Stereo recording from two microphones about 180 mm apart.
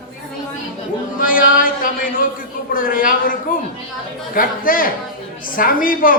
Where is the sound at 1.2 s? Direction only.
50° left (ahead or behind).